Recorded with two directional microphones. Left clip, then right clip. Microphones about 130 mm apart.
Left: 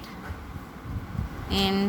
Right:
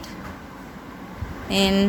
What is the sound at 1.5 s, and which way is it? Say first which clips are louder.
Speech: right 5 dB; 10° right (ahead or behind).